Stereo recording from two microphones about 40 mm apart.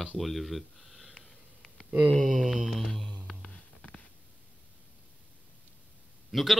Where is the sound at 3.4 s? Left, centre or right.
Left.